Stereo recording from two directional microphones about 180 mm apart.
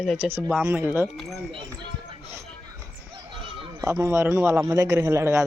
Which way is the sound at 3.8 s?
15° right (ahead or behind).